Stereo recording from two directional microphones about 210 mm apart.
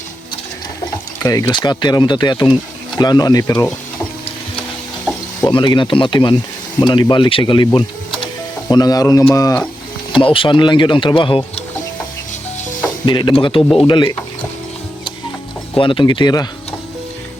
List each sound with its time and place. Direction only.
1.2 s speech: 15° left (ahead or behind)
5.5 s speech: 20° left (ahead or behind)
12.8 s speech: 20° left (ahead or behind)
13.6 s speech: centre (ahead or behind)
13.8 s speech: 20° left (ahead or behind)
15.7 s speech: 25° left (ahead or behind)